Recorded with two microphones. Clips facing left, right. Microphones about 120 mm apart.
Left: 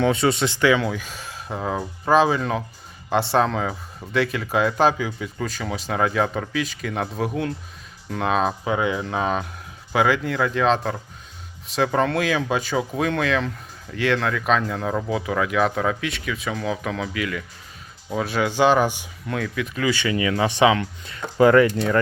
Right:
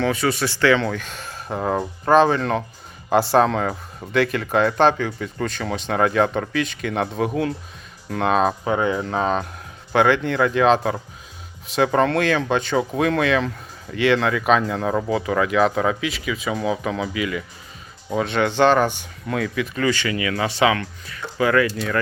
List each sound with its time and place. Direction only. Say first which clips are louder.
0.0 s speech: left 1 dB; 25° left (ahead or behind)
19.3 s speech: right 3 dB; centre (ahead or behind)
19.9 s speech: left 1 dB; 15° left (ahead or behind)